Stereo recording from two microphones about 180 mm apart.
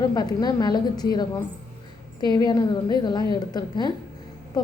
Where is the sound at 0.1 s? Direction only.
20° left (ahead or behind).